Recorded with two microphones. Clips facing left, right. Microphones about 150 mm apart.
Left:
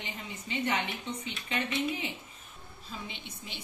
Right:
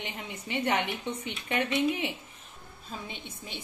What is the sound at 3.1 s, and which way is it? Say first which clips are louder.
Speech: right 3 dB; 50° right (ahead or behind).